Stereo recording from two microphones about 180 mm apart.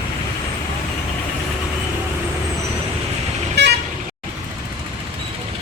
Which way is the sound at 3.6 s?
65° right (ahead or behind).